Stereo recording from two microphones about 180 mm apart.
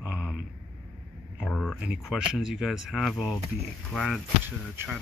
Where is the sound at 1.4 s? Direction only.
Centre (ahead or behind).